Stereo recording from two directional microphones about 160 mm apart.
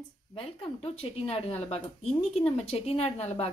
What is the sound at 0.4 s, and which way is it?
A woman's voice, 40° left (ahead or behind).